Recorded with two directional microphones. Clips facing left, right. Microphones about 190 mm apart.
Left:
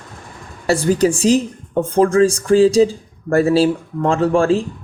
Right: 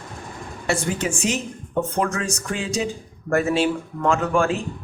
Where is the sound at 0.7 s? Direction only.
35° left (ahead or behind).